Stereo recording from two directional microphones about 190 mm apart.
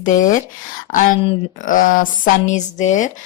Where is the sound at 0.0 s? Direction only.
45° left (ahead or behind).